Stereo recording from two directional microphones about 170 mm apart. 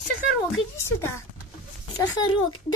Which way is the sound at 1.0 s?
15° left (ahead or behind).